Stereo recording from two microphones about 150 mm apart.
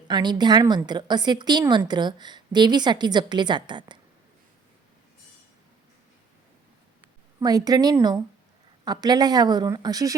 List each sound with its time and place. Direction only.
0.1 s a woman's voice: 30° right (ahead or behind)
7.3 s a woman's voice: 25° right (ahead or behind)